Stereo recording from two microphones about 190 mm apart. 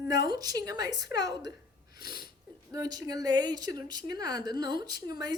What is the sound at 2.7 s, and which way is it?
A woman's voice, 20° right (ahead or behind).